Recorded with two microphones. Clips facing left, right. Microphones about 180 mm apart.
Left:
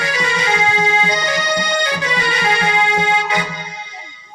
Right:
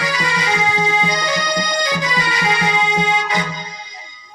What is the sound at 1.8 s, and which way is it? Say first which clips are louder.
Accordion: even; 25° left (ahead or behind).